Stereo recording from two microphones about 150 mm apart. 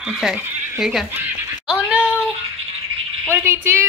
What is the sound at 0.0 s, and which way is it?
Speech, 5° right (ahead or behind).